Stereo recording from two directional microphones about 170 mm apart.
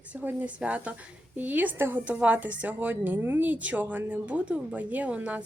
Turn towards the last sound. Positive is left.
turn(degrees=-10)  # may be behind; listen again after turning